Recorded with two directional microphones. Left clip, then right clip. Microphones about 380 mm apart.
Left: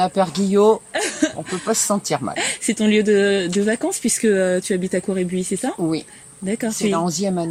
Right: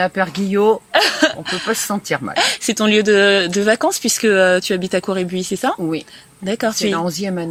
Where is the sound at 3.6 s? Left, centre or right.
Right.